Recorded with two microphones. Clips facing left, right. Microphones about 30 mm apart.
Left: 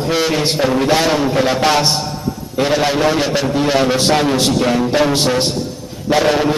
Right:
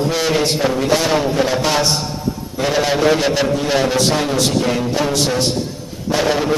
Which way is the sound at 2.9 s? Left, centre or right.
Centre.